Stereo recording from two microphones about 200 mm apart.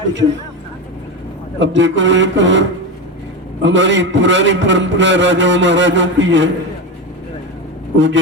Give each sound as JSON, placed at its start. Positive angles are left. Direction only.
{"t": 1.5, "sound": "a man's voice", "side_deg": -65}
{"t": 7.9, "sound": "a man's voice", "side_deg": -65}